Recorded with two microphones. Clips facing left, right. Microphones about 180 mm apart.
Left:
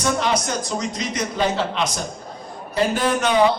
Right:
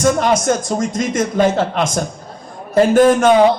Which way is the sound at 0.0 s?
50° right (ahead or behind).